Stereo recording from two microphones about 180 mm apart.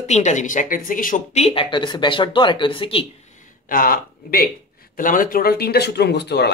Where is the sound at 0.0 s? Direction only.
40° left (ahead or behind).